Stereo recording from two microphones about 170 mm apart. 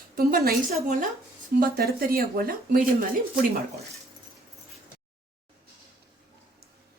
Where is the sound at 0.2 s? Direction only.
60° right (ahead or behind).